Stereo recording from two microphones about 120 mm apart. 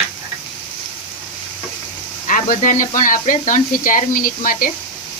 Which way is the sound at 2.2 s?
90° left.